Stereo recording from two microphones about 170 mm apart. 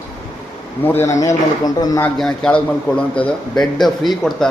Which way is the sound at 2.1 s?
5° left (ahead or behind).